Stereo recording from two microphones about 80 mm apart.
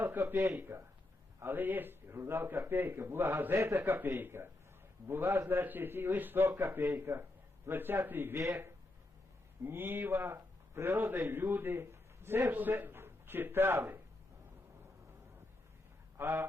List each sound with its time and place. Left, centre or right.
0.0 s speech: right
9.6 s a man's voice: right
16.1 s speech: right